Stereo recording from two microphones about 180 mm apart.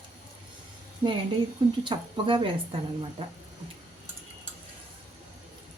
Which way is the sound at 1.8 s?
30° right (ahead or behind).